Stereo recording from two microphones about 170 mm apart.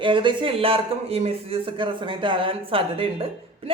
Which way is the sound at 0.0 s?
30° right (ahead or behind).